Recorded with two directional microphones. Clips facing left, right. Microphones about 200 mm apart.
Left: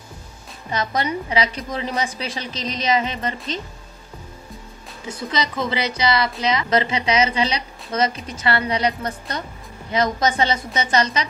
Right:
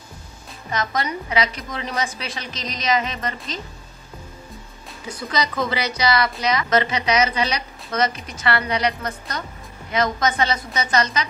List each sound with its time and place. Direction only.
0.7 s a woman's voice: 30° left (ahead or behind)
5.0 s a woman's voice: 25° left (ahead or behind)